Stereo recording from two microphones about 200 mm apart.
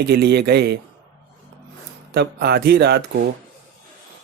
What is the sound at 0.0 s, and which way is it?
Speech, 55° right (ahead or behind).